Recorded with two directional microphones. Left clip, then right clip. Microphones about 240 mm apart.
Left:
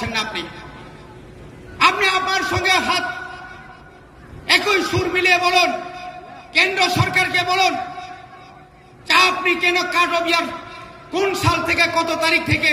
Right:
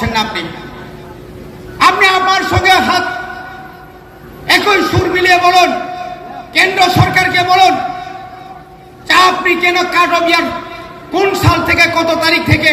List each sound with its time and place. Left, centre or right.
0.0 s a man's voice: centre
1.8 s a man's voice: centre
4.5 s a man's voice: centre
9.0 s a man's voice: centre